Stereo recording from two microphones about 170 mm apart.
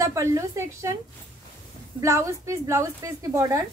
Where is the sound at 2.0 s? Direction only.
15° right (ahead or behind).